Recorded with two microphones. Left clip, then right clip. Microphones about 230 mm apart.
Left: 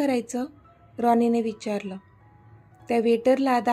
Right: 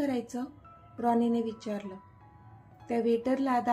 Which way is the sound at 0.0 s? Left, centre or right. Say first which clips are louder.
Left 7 dB; left.